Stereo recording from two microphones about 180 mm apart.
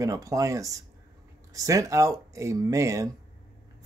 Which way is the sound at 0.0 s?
20° right (ahead or behind).